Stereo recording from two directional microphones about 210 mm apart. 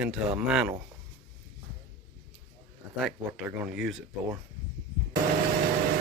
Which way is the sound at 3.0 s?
5° right (ahead or behind).